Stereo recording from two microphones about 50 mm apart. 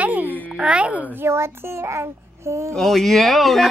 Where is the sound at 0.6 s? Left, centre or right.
Right.